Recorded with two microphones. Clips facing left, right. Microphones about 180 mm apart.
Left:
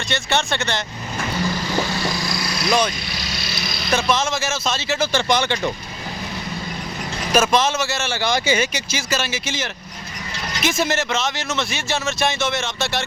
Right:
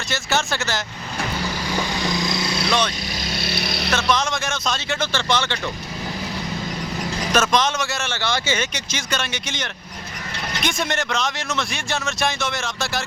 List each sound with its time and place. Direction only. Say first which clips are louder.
0.1 s speech: left 1 dB; centre (ahead or behind)
1.5 s vehicle: left 2 dB; 10° right (ahead or behind)
2.6 s speech: left 4 dB; 10° left (ahead or behind)
3.1 s vehicle: right 3 dB; 50° right (ahead or behind)
3.9 s speech: left 2 dB; 5° left (ahead or behind)
5.1 s speech: left 3 dB; 15° left (ahead or behind)
7.3 s speech: left 3 dB; 10° left (ahead or behind)
8.1 s speech: left 5 dB; 15° left (ahead or behind)